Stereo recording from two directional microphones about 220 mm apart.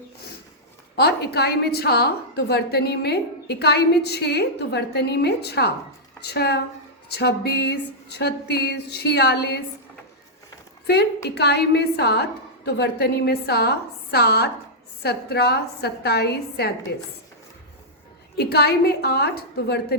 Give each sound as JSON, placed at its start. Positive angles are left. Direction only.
{"t": 0.9, "sound": "a woman's voice", "side_deg": 45}
{"t": 11.3, "sound": "a woman's voice", "side_deg": 50}
{"t": 18.3, "sound": "a woman's voice", "side_deg": 45}